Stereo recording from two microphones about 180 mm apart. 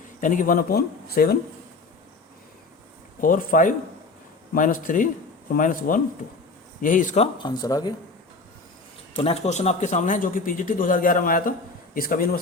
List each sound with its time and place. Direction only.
0.2 s speech: 45° left (ahead or behind)
3.2 s speech: 50° left (ahead or behind)
7.3 s speech: 25° left (ahead or behind)
9.1 s speech: 35° left (ahead or behind); by 12.4 s 55° left (ahead or behind)